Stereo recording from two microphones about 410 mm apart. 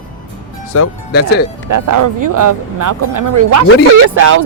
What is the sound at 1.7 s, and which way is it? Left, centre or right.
Speech, right.